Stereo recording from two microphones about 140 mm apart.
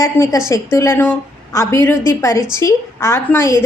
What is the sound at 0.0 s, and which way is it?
A woman's voice, 20° left (ahead or behind).